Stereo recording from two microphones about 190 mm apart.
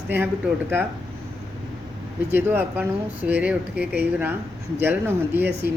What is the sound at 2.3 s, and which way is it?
Speech, 10° right (ahead or behind).